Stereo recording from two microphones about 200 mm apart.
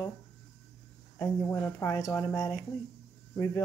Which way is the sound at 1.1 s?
15° left (ahead or behind).